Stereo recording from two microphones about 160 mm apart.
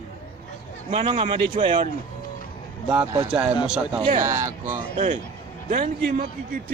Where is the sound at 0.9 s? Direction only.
35° right (ahead or behind).